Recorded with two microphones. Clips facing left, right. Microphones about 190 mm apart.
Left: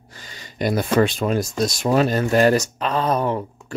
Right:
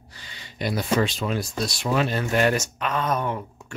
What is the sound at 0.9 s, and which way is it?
Speech, 55° left (ahead or behind).